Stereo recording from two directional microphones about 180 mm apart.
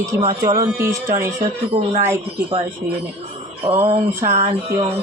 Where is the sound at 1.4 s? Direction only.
35° right (ahead or behind).